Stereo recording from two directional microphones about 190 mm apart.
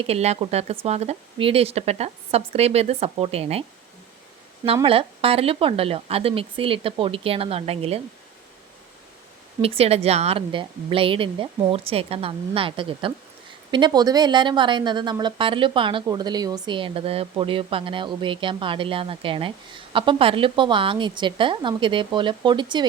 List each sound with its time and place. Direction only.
0.0 s speech: 35° right (ahead or behind)
4.6 s a woman's voice: 30° right (ahead or behind)
9.6 s a woman's voice: 30° right (ahead or behind)